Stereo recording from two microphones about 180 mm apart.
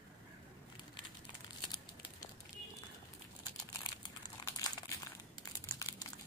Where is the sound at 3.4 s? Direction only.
20° left (ahead or behind).